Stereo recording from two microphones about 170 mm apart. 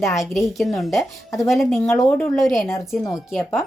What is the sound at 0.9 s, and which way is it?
Speech, 20° left (ahead or behind).